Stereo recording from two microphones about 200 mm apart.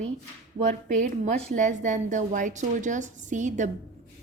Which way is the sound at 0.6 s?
35° right (ahead or behind).